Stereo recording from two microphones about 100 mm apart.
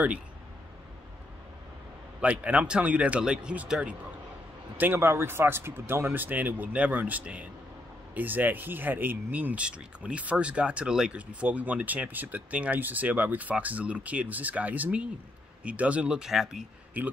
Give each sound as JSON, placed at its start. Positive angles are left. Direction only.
{"t": 2.2, "sound": "speech", "side_deg": -15}
{"t": 4.7, "sound": "speech", "side_deg": -20}
{"t": 17.0, "sound": "speech", "side_deg": -15}